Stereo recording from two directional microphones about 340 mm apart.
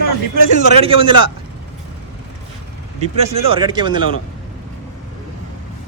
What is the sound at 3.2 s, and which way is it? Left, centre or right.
Speech, centre.